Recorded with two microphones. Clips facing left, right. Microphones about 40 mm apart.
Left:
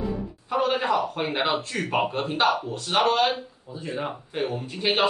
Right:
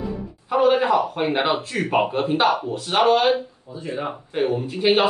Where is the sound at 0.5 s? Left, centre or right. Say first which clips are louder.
Right 6 dB; centre.